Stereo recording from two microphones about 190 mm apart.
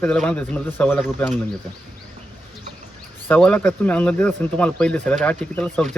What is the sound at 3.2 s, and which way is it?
Speech, 10° left (ahead or behind).